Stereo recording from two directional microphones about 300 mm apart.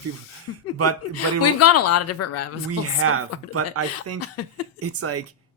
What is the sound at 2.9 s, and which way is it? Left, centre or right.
Speech, right.